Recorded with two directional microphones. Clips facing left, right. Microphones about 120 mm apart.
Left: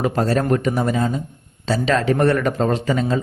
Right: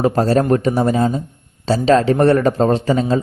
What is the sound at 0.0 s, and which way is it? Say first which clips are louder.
Speech: right 4 dB; 35° right (ahead or behind).